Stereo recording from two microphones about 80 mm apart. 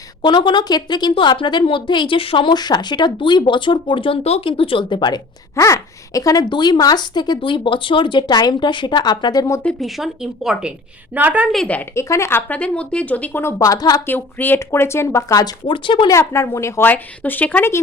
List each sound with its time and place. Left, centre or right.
0.2 s a woman's voice: left
5.5 s speech: left
6.5 s speech: left
9.8 s a woman's voice: centre
11.1 s a woman's voice: centre
11.9 s speech: left
12.5 s speech: centre
13.6 s speech: left
14.1 s speech: left
15.6 s speech: left
16.0 s speech: left
16.8 s speech: left